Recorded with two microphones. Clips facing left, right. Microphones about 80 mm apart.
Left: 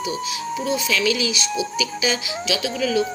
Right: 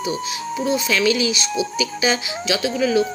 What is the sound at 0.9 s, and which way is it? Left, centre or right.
Speech, right.